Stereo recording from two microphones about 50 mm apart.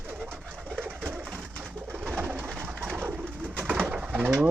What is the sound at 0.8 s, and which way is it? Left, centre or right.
Bird, right.